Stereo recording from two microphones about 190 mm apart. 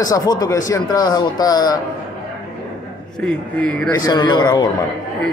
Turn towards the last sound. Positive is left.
turn(degrees=20)  # may be behind; listen again after turning